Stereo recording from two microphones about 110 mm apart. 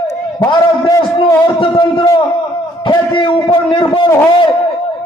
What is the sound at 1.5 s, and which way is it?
A man's voice, 45° left (ahead or behind).